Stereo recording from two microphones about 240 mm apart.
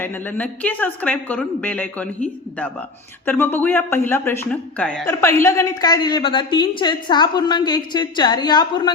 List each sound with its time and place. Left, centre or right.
0.0 s speech: centre